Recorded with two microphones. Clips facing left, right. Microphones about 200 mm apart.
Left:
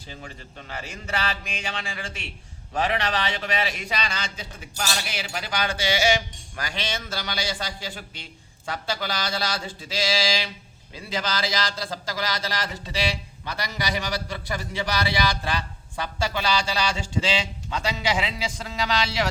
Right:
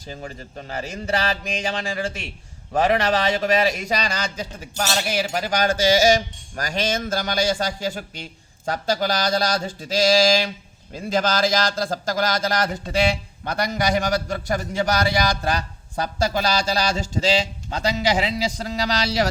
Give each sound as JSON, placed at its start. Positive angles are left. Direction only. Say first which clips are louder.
{"t": 0.1, "sound": "a man's voice", "louder": "right 7 dB", "side_deg": -40}